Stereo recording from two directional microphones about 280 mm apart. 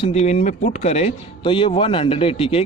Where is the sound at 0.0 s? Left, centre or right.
Left.